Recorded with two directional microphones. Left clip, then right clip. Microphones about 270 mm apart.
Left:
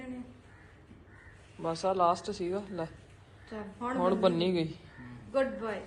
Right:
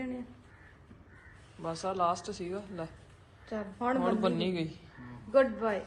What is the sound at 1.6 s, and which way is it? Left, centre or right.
Speech, centre.